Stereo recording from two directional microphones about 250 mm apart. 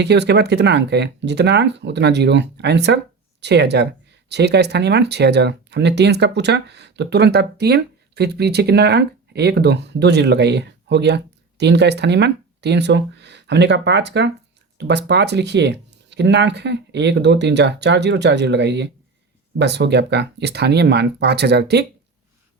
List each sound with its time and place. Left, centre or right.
0.0 s speech: right